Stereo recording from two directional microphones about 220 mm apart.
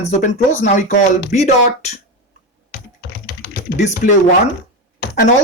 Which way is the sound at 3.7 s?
35° left (ahead or behind).